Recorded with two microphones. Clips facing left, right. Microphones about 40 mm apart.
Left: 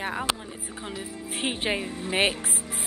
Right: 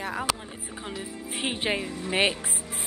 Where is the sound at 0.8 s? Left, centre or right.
Centre.